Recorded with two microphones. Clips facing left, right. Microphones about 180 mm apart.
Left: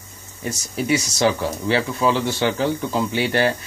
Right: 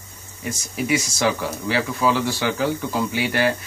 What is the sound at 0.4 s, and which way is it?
Speech, 30° left (ahead or behind).